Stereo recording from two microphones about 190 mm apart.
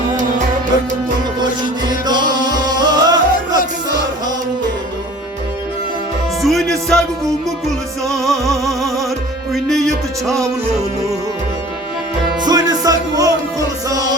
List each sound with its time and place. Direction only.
1.4 s music: 20° right (ahead or behind)
6.4 s music: centre (ahead or behind)
8.0 s music: centre (ahead or behind)
12.4 s music: 20° right (ahead or behind)